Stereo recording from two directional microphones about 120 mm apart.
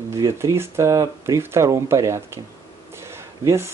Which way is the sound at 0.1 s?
25° right (ahead or behind).